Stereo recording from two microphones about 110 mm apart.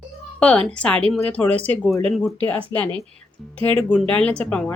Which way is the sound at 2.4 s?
15° left (ahead or behind).